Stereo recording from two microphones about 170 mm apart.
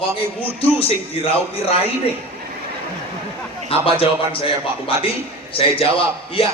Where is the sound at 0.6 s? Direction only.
35° left (ahead or behind).